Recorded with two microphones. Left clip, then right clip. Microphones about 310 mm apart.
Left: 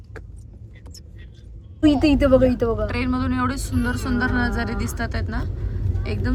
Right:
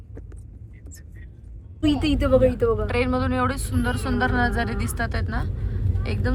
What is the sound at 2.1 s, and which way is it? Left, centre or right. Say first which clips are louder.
Speech: right 1 dB; left.